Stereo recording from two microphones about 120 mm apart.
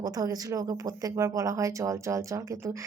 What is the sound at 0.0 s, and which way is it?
Speech, 30° right (ahead or behind).